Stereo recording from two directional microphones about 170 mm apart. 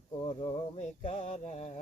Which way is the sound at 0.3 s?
35° left (ahead or behind).